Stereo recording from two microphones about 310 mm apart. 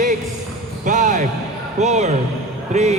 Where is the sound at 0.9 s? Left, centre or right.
Right.